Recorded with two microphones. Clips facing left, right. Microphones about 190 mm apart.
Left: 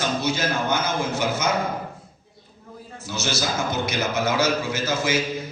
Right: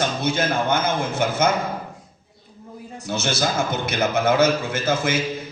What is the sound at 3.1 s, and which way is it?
A man's voice, 55° right (ahead or behind).